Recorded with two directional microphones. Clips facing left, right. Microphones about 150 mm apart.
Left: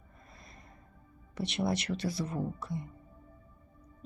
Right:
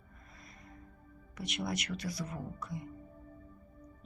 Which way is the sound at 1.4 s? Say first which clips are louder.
Left 6 dB; 30° left (ahead or behind).